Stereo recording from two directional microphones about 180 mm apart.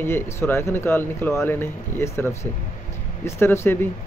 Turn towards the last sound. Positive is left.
turn(degrees=10)  # may be behind; listen again after turning